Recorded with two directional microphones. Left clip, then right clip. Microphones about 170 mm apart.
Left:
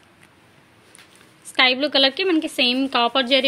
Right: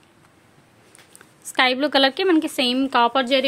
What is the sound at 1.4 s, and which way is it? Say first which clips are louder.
A woman's voice: left 1 dB; 20° right (ahead or behind).